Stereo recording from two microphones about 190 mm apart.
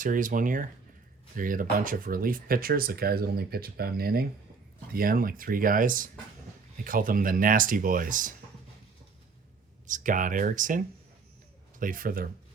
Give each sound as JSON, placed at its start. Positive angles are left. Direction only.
{"t": 0.0, "sound": "speech", "side_deg": -45}
{"t": 9.8, "sound": "speech", "side_deg": -45}